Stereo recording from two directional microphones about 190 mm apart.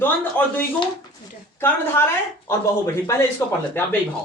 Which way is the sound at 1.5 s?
10° left (ahead or behind).